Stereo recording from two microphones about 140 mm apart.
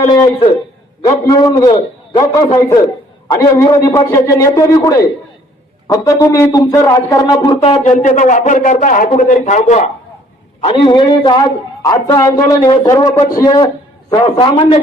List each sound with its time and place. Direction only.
1.0 s a man's voice: 25° left (ahead or behind)
7.9 s speech: 65° left (ahead or behind)
10.6 s a man's voice: 35° left (ahead or behind)